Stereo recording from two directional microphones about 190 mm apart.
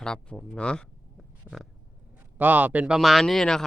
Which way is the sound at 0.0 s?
5° left (ahead or behind).